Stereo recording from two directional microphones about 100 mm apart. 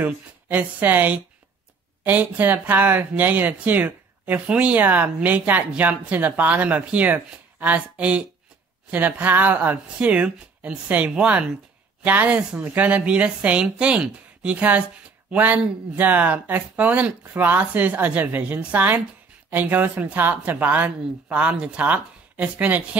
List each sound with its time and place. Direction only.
0.0 s speech: 15° right (ahead or behind)